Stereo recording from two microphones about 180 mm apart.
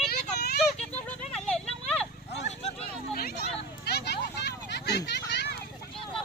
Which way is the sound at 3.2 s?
60° left (ahead or behind).